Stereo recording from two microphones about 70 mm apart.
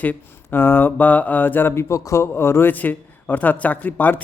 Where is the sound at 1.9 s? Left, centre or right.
Left.